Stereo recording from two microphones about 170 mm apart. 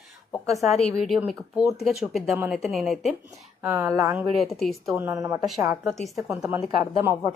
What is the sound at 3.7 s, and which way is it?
Speech, 15° right (ahead or behind).